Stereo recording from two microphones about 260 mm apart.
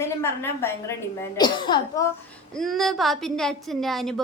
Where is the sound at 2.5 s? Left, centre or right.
Centre.